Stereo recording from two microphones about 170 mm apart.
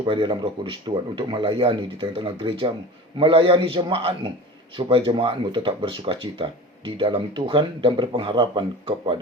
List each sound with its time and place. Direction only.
0.0 s speech: 30° right (ahead or behind)